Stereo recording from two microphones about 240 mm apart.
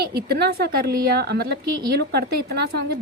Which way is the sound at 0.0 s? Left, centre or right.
Right.